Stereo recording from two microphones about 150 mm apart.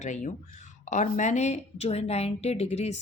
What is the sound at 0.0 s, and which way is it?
Speech, 55° left (ahead or behind).